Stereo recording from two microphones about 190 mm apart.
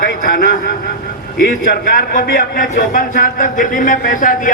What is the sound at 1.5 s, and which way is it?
Speech, 45° left (ahead or behind).